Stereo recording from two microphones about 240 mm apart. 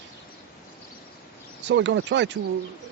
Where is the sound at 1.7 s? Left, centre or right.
Right.